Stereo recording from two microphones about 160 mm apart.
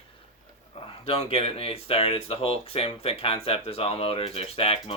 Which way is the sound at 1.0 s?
35° left (ahead or behind).